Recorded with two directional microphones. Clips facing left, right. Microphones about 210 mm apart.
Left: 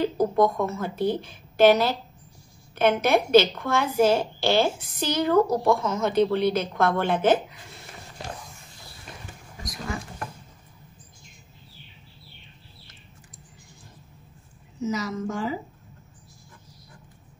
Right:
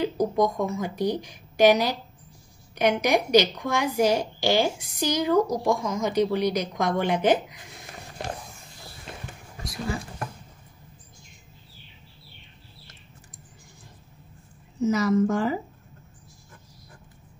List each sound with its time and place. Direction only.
0.0 s a woman's voice: 15° right (ahead or behind)
9.6 s a sound: 30° right (ahead or behind)
14.8 s a woman's voice: 55° right (ahead or behind)